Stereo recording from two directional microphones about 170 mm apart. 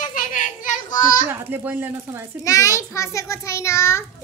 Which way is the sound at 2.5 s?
20° left (ahead or behind).